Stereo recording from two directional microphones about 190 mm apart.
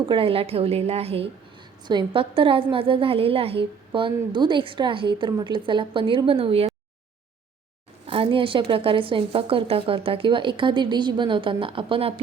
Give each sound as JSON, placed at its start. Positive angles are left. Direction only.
{"t": 0.0, "sound": "a woman's voice", "side_deg": -25}
{"t": 8.0, "sound": "a woman's voice", "side_deg": -30}